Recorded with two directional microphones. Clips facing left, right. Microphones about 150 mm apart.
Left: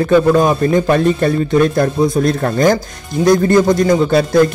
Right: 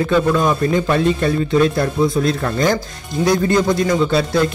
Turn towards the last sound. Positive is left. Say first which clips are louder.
# left 5 dB
turn(degrees=45)  # may be behind; listen again after turning